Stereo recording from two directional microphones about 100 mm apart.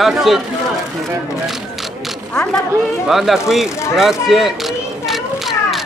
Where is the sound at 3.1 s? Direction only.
Centre (ahead or behind).